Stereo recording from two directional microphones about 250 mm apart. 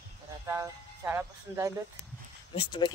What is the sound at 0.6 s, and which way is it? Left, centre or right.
Speech, centre.